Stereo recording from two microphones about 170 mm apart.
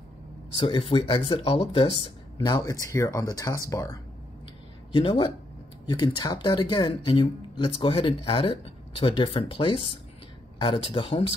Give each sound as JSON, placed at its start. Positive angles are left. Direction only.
{"t": 0.6, "sound": "speech", "side_deg": 30}
{"t": 2.3, "sound": "speech", "side_deg": 20}
{"t": 4.9, "sound": "speech", "side_deg": 30}